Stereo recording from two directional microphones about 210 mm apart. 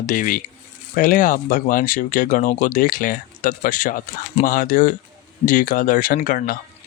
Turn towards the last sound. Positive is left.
turn(degrees=45)  # may be behind; listen again after turning